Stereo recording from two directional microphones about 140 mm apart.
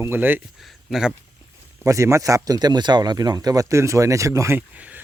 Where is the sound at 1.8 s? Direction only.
20° right (ahead or behind).